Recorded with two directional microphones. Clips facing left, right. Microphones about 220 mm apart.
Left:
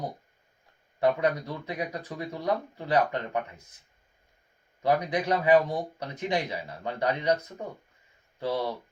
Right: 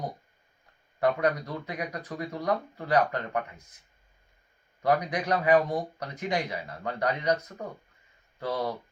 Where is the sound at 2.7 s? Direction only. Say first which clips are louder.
Right 1 dB; 20° left (ahead or behind).